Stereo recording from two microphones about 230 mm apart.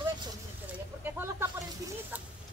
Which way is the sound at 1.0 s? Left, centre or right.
Centre.